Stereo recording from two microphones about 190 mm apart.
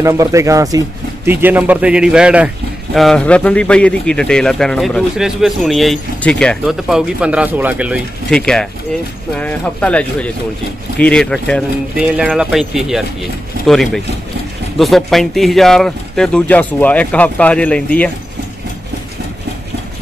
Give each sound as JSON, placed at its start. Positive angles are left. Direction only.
{"t": 0.0, "sound": "speech", "side_deg": -15}
{"t": 8.3, "sound": "speech", "side_deg": 5}